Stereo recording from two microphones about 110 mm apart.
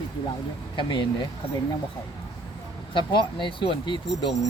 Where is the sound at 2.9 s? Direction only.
45° left (ahead or behind).